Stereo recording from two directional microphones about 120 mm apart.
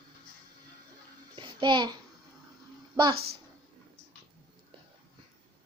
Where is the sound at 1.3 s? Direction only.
40° right (ahead or behind).